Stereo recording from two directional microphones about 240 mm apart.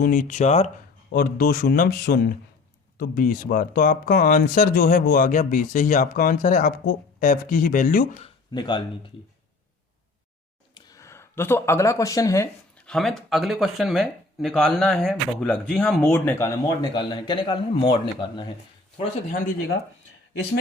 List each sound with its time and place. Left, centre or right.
0.0 s speech: left
1.1 s speech: left
8.5 s speech: centre
10.8 s speech: centre